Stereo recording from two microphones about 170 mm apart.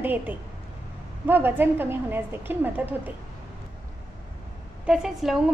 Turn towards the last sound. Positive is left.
turn(degrees=-5)  # may be behind; listen again after turning